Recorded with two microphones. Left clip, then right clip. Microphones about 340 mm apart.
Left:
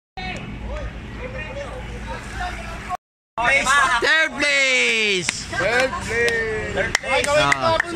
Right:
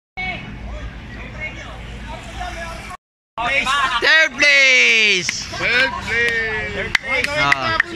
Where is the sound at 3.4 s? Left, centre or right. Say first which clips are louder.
Left 1 dB; centre.